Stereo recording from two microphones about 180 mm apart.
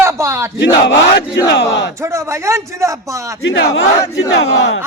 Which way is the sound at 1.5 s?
75° left (ahead or behind).